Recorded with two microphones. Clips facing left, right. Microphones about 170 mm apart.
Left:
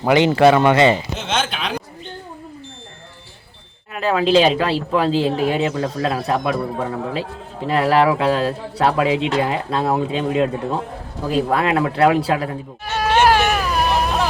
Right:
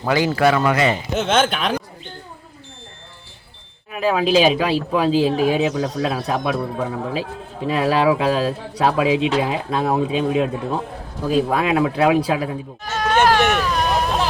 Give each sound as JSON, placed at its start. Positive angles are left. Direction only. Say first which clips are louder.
{"t": 0.0, "sound": "speech", "louder": "left 4 dB", "side_deg": 20}
{"t": 1.3, "sound": "speech", "louder": "right 4 dB", "side_deg": -50}
{"t": 3.9, "sound": "speech", "louder": "left 1 dB", "side_deg": -10}
{"t": 12.8, "sound": "mosquito", "louder": "left 1 dB", "side_deg": 10}